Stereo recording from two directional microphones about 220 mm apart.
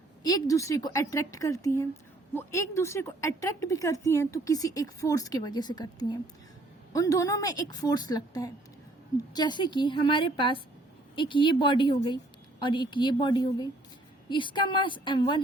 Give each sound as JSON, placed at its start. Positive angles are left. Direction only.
{"t": 0.2, "sound": "a woman's voice", "side_deg": 15}